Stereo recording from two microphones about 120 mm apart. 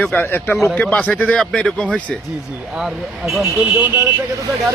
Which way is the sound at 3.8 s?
15° right (ahead or behind).